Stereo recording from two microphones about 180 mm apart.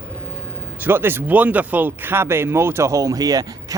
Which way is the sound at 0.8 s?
10° right (ahead or behind).